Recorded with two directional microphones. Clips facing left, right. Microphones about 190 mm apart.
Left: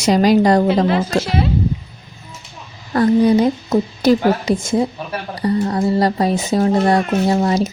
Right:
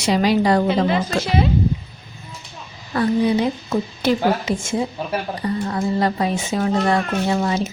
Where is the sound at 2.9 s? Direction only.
45° left (ahead or behind).